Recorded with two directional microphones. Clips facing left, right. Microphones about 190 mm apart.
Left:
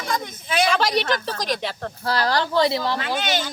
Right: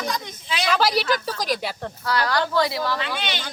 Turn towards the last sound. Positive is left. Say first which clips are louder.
# left 5 dB
turn(degrees=45)  # may be behind; listen again after turning